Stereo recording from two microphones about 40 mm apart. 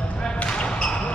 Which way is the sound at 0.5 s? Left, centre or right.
Left.